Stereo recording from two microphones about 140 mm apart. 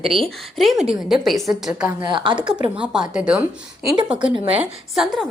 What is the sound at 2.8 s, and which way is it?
Speech, 5° right (ahead or behind).